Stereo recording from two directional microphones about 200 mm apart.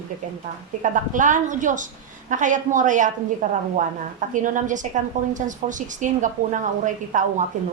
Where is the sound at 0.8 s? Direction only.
40° right (ahead or behind).